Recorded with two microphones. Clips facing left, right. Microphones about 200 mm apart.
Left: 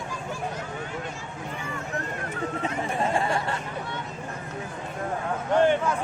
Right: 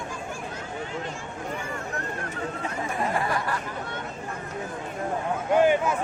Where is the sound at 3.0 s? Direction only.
25° left (ahead or behind).